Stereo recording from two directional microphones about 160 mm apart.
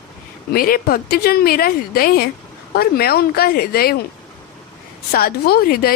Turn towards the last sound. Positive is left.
turn(degrees=70)  # may be behind; listen again after turning